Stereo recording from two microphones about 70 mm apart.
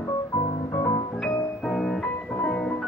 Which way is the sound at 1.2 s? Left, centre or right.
Centre.